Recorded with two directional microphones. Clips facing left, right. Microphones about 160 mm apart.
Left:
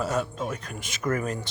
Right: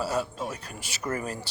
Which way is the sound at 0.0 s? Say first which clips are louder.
Left 1 dB; 35° right (ahead or behind).